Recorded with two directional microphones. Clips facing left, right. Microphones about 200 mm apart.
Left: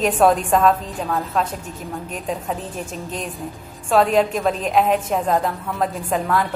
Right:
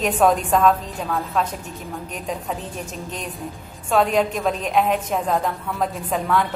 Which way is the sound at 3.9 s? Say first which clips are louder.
Left 2 dB; centre (ahead or behind).